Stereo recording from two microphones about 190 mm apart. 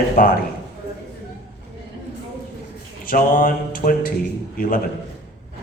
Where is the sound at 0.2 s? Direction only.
45° left (ahead or behind).